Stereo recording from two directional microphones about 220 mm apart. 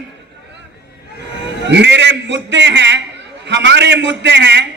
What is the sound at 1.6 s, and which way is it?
A man's voice, 55° right (ahead or behind).